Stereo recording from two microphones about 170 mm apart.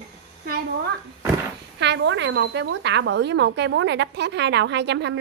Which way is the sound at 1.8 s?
90° right.